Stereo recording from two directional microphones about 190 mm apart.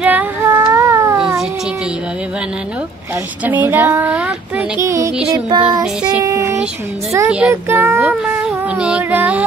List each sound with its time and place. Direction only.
0.0 s child singing: 10° right (ahead or behind)
3.4 s a woman's voice: 10° right (ahead or behind)
4.8 s music: 15° right (ahead or behind)
5.3 s child singing: 20° right (ahead or behind)
7.1 s a woman's voice: 15° right (ahead or behind)
7.3 s child singing: 10° right (ahead or behind)